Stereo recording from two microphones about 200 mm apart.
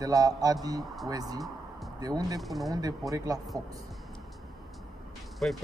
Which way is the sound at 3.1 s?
15° right (ahead or behind).